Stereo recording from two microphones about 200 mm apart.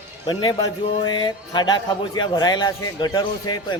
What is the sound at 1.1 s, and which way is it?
A man's voice, 20° left (ahead or behind).